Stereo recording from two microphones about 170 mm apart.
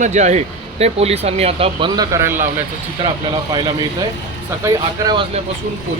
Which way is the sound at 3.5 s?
25° right (ahead or behind).